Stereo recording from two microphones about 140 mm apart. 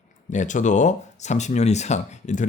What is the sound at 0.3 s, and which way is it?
Speech, 60° left (ahead or behind).